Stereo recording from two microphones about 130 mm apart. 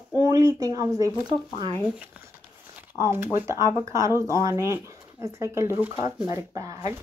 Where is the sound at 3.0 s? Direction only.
20° right (ahead or behind).